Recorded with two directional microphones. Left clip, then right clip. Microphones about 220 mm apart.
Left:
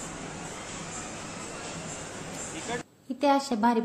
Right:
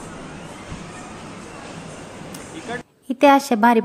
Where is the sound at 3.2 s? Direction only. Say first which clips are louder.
Right 10 dB; 40° right (ahead or behind).